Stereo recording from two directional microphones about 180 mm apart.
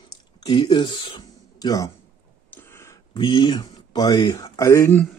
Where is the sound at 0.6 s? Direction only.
30° left (ahead or behind).